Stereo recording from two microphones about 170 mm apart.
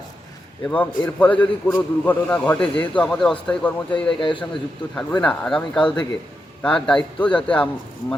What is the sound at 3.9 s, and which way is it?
Speech, 30° left (ahead or behind).